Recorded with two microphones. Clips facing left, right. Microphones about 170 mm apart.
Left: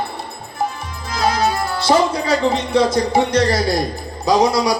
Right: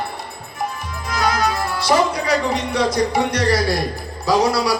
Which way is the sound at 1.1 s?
30° left (ahead or behind).